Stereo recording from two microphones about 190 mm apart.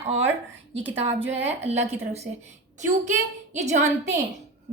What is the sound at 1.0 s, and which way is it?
A woman's voice, 30° right (ahead or behind).